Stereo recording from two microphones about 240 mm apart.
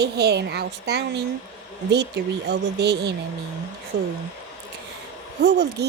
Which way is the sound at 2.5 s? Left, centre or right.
Right.